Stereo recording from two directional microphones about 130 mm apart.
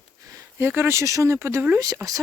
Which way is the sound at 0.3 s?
20° right (ahead or behind).